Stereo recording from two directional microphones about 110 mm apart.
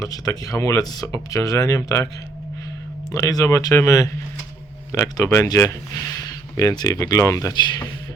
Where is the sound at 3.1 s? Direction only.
30° left (ahead or behind).